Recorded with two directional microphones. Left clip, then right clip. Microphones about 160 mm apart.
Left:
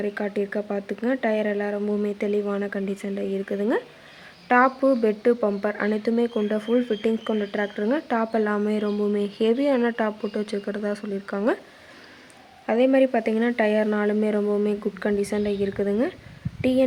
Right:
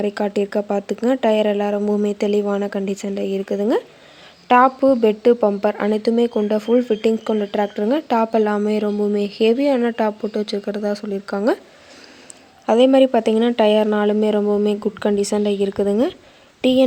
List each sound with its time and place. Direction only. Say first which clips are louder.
0.0 s speech: right 6 dB; 40° right (ahead or behind)
12.6 s a woman's voice: right 6 dB; 35° right (ahead or behind)